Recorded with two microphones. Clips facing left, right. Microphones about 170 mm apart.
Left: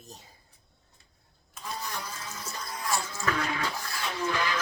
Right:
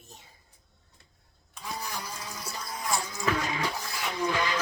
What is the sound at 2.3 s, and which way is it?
Music, 15° right (ahead or behind).